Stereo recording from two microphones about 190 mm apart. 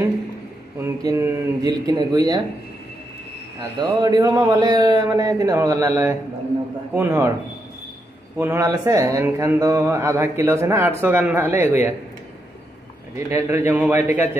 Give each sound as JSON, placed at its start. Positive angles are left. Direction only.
{"t": 0.7, "sound": "a man's voice", "side_deg": -15}
{"t": 3.5, "sound": "a man's voice", "side_deg": -20}
{"t": 8.4, "sound": "speech", "side_deg": -15}
{"t": 13.1, "sound": "speech", "side_deg": -15}